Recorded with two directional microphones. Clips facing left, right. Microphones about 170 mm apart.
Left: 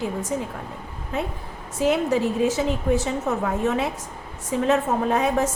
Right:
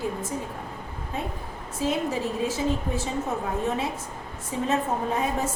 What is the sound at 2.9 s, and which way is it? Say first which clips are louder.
A woman's voice: left 5 dB; 85° left.